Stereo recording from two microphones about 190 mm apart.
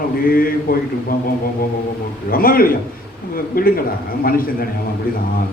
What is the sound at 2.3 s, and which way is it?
A man's voice, 50° left (ahead or behind).